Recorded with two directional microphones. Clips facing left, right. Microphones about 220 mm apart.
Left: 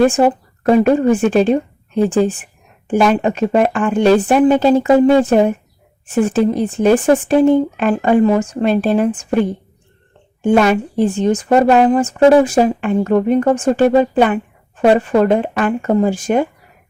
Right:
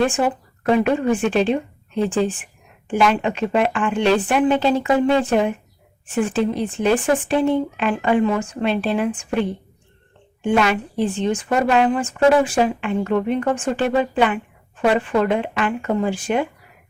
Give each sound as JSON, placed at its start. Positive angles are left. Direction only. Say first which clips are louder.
{"t": 0.0, "sound": "speech", "louder": "left 7 dB", "side_deg": 40}